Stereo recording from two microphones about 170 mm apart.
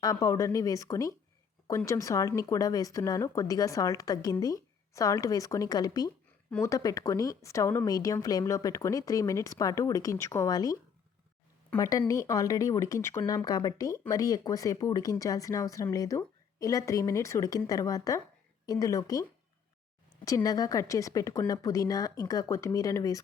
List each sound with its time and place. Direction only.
0.0 s speech: 20° left (ahead or behind)
11.8 s speech: 20° left (ahead or behind)
20.2 s speech: 20° left (ahead or behind)